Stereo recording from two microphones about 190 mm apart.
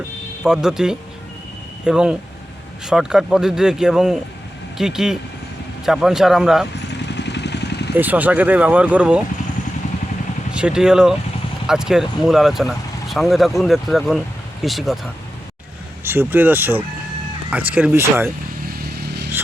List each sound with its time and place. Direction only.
0.4 s speech: 5° right (ahead or behind)
6.7 s vehicle: 65° left (ahead or behind)
7.9 s speech: 10° right (ahead or behind)
10.5 s speech: 5° right (ahead or behind)
16.0 s speech: 10° right (ahead or behind)
18.9 s vehicle: 60° right (ahead or behind)